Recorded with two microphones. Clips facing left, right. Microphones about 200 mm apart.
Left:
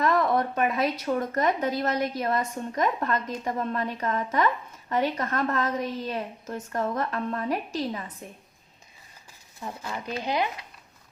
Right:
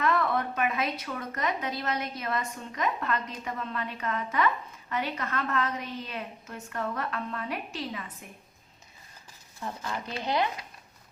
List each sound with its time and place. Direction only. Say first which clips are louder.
0.0 s speech: left 4 dB; 40° left (ahead or behind)
9.6 s speech: even; 15° left (ahead or behind)